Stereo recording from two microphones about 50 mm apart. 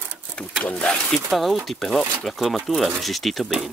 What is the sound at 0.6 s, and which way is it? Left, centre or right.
Speech, left.